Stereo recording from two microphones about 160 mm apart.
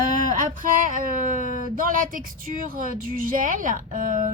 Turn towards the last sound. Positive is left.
turn(degrees=-55)  # may be behind; listen again after turning